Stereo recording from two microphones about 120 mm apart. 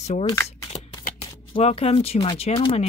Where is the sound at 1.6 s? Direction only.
60° left (ahead or behind).